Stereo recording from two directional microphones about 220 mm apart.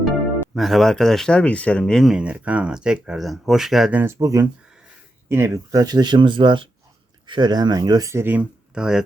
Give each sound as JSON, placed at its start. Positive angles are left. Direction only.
{"t": 0.5, "sound": "speech", "side_deg": 0}